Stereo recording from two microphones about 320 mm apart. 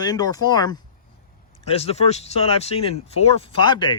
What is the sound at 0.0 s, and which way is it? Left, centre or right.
Speech, centre.